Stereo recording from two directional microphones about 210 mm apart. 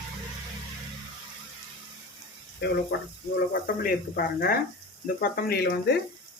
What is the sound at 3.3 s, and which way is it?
Speech, 45° left (ahead or behind).